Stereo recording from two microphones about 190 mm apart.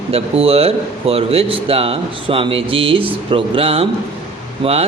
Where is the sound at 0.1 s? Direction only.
30° right (ahead or behind).